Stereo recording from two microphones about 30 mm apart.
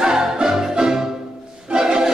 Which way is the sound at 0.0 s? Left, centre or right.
Right.